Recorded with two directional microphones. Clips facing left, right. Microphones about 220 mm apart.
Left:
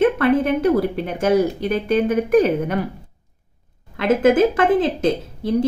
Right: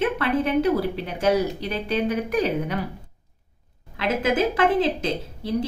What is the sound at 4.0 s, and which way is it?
A woman's voice, 50° left (ahead or behind).